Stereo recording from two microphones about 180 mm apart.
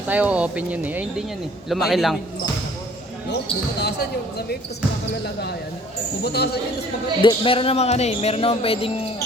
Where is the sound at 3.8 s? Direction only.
65° left (ahead or behind).